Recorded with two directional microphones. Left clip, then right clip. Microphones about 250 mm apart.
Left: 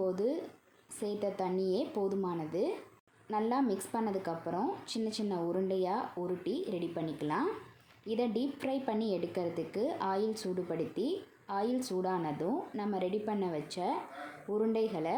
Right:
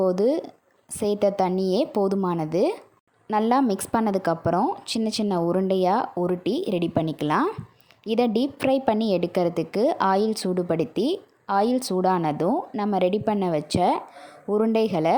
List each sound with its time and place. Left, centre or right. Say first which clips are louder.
0.0 s a woman's voice: right 12 dB; right